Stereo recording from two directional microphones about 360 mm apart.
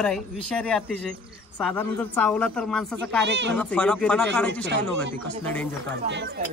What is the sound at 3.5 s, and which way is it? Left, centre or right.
Speech, centre.